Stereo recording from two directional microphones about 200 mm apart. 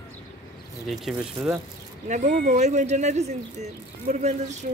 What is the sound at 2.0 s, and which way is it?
Speech, 35° right (ahead or behind).